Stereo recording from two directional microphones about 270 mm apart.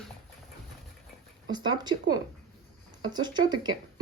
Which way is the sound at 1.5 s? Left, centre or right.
Centre.